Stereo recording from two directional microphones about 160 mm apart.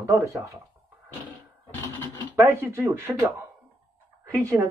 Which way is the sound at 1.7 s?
10° left (ahead or behind).